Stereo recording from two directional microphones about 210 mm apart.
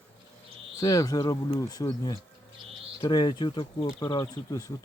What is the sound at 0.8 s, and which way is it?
Speech, 15° left (ahead or behind).